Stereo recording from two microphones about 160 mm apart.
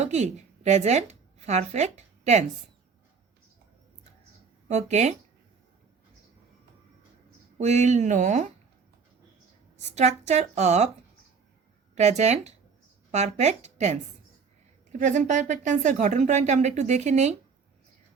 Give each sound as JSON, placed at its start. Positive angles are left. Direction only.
{"t": 0.0, "sound": "a woman's voice", "side_deg": -45}
{"t": 4.7, "sound": "speech", "side_deg": -45}
{"t": 7.6, "sound": "speech", "side_deg": -45}
{"t": 9.7, "sound": "speech", "side_deg": -45}
{"t": 11.9, "sound": "speech", "side_deg": -45}